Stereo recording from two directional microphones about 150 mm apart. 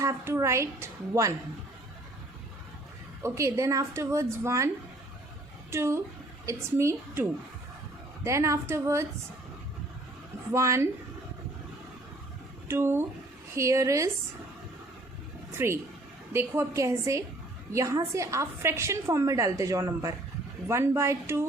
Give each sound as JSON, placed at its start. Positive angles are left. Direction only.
{"t": 0.0, "sound": "a woman's voice", "side_deg": -20}
{"t": 3.2, "sound": "a woman's voice", "side_deg": -20}
{"t": 5.7, "sound": "a woman's voice", "side_deg": -20}
{"t": 10.5, "sound": "a woman's voice", "side_deg": -20}
{"t": 12.6, "sound": "a woman's voice", "side_deg": -15}
{"t": 15.5, "sound": "a woman's voice", "side_deg": -15}